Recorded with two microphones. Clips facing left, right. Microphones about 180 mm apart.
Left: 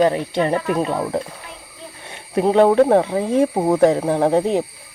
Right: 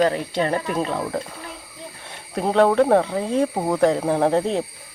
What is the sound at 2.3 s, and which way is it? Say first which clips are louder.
Speech: left 4 dB; 10° left (ahead or behind).